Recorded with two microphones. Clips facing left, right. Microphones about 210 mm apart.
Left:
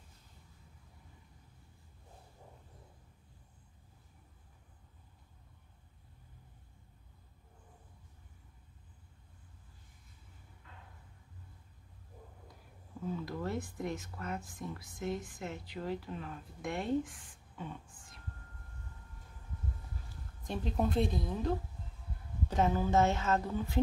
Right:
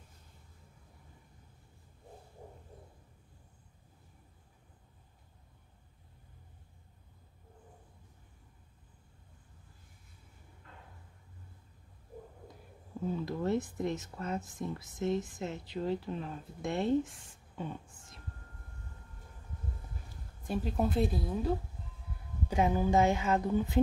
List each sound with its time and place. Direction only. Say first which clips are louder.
13.2 s speech: right 8 dB; 20° right (ahead or behind)
20.4 s speech: right 2 dB; 5° right (ahead or behind)